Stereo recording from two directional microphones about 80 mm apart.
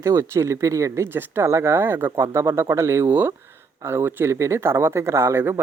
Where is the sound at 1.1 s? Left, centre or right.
Right.